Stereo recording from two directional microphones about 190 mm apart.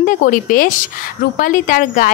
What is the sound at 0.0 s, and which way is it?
Speech, 45° left (ahead or behind).